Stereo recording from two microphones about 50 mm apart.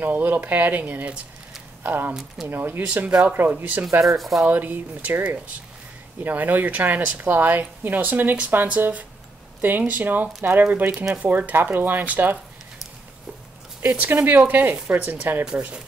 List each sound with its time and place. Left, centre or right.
0.0 s speech: right
1.8 s speech: right
2.8 s speech: right
3.3 s speech: right
4.2 s speech: centre
4.5 s speech: right
9.6 s speech: right
13.8 s speech: right
15.4 s speech: right